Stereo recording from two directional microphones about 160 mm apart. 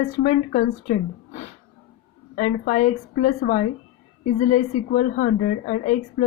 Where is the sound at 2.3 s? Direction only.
50° left (ahead or behind).